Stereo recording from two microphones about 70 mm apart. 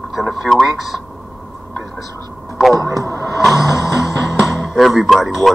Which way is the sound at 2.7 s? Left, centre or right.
Right.